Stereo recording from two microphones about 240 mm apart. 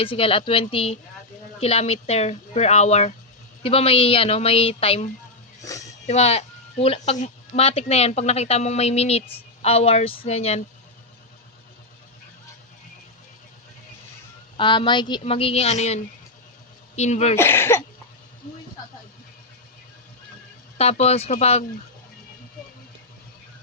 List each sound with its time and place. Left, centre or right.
0.0 s speech: left
5.6 s speech: centre
6.1 s speech: left
14.5 s speech: left
17.3 s speech: centre
20.7 s speech: left